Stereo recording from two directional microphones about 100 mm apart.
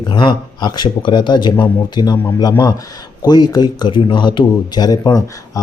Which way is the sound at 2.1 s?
40° left (ahead or behind).